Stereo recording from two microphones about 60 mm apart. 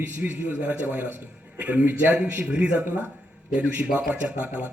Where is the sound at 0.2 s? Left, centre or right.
Right.